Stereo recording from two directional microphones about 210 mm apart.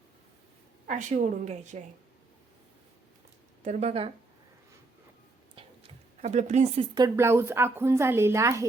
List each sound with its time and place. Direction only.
0.9 s a woman's voice: 35° right (ahead or behind)
3.6 s a woman's voice: 30° right (ahead or behind)
5.6 s a sound: 25° right (ahead or behind)
6.2 s a woman's voice: 35° right (ahead or behind)
6.9 s a woman's voice: 15° right (ahead or behind)